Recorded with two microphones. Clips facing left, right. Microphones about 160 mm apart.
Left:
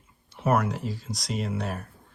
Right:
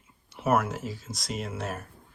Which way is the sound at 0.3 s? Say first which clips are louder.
Left 1 dB; centre (ahead or behind).